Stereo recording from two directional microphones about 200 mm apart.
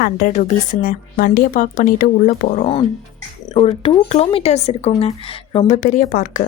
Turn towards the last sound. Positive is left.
turn(degrees=40)  # may be behind; listen again after turning